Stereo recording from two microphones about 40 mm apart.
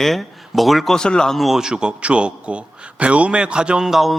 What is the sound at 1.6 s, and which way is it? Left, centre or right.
A man's voice, right.